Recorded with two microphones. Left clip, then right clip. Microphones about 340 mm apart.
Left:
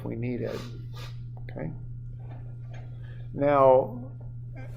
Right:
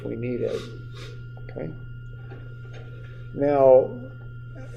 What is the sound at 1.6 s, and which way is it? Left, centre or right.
Speech, left.